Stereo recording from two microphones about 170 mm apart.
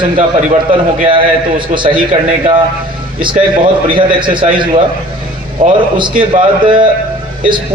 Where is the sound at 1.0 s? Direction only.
30° right (ahead or behind).